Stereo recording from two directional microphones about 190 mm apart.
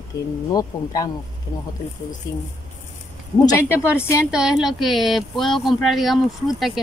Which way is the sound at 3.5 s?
15° left (ahead or behind).